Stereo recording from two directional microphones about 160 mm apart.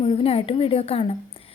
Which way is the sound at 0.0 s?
35° left (ahead or behind).